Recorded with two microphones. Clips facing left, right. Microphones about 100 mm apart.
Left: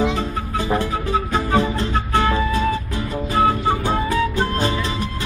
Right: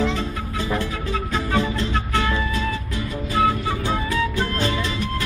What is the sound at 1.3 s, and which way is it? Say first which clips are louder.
Music: left 2 dB; 35° left (ahead or behind).